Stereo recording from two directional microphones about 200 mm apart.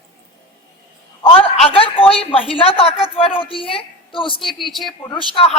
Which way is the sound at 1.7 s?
25° left (ahead or behind).